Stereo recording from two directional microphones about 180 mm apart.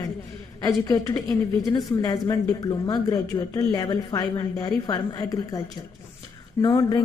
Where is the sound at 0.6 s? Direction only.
20° left (ahead or behind).